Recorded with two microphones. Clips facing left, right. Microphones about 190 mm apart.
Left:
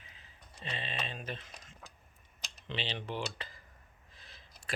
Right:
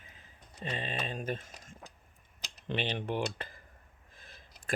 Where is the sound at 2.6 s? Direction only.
50° right (ahead or behind).